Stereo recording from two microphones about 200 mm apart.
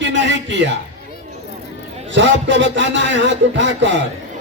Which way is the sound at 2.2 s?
65° right (ahead or behind).